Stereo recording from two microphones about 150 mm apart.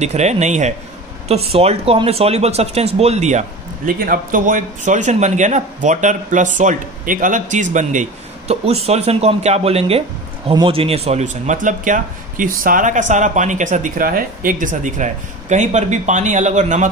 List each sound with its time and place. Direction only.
0.0 s speech: 50° right (ahead or behind)
4.0 s a man's voice: 65° right (ahead or behind)